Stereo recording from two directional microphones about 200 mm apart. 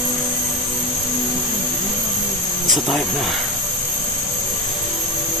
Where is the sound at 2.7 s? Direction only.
Centre (ahead or behind).